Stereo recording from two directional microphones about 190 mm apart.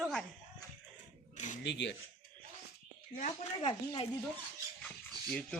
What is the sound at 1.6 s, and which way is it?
Speech, 65° left (ahead or behind).